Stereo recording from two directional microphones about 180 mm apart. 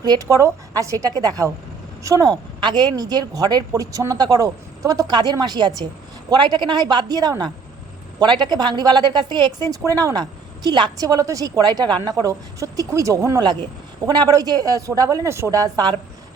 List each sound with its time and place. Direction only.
0.0 s a woman's voice: 20° right (ahead or behind)